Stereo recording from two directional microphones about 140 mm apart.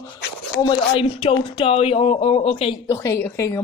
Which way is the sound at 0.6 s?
35° left (ahead or behind).